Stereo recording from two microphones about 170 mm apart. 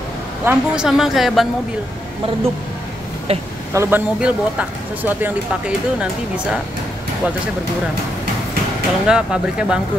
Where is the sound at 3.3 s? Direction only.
35° right (ahead or behind).